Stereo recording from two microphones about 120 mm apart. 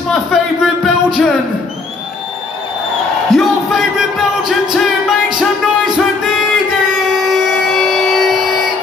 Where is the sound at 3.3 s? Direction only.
Centre (ahead or behind).